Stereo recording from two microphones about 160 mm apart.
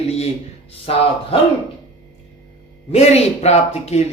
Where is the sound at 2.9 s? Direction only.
40° left (ahead or behind).